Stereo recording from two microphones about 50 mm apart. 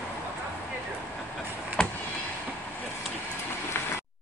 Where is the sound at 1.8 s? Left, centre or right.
Centre.